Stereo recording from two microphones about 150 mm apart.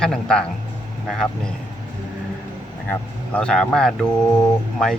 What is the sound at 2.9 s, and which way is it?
Speech, 10° left (ahead or behind).